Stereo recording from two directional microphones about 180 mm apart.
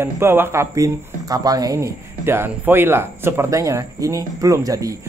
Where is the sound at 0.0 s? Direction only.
15° right (ahead or behind).